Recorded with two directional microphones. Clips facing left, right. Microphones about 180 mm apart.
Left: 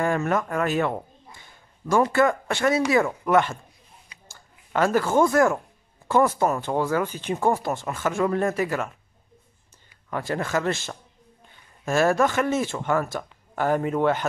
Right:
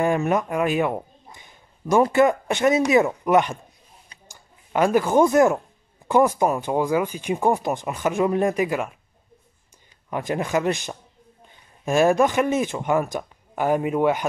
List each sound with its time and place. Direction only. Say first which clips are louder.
0.0 s a man's voice: right 3 dB; 15° right (ahead or behind)
10.0 s speech: right 2 dB; 15° right (ahead or behind)